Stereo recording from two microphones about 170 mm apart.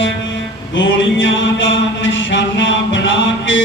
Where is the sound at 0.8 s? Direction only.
90° left.